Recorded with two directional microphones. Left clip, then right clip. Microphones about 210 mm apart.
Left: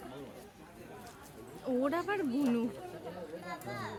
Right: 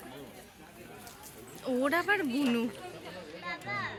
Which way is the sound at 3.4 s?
25° left (ahead or behind).